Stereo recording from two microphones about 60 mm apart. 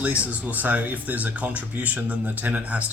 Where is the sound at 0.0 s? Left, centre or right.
Right.